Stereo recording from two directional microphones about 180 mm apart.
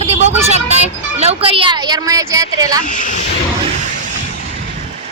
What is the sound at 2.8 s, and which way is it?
Speech, 45° left (ahead or behind).